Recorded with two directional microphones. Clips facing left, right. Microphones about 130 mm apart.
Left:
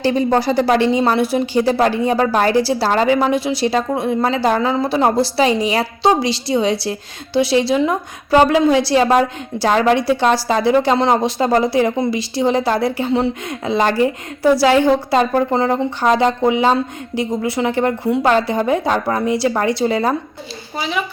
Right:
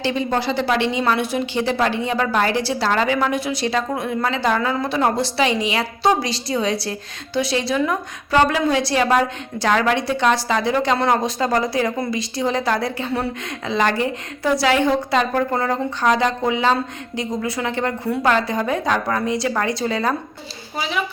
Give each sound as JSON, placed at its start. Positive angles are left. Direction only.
{"t": 0.0, "sound": "a woman's voice", "side_deg": 40}
{"t": 20.7, "sound": "a woman's voice", "side_deg": 0}